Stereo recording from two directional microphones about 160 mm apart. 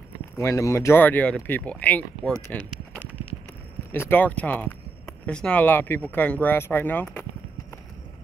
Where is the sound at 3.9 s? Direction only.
15° left (ahead or behind).